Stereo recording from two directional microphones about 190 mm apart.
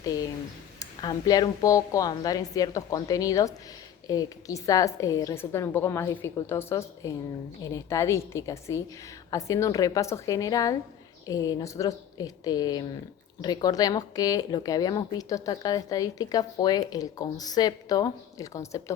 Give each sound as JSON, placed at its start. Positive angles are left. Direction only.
{"t": 0.8, "sound": "a woman's voice", "side_deg": 20}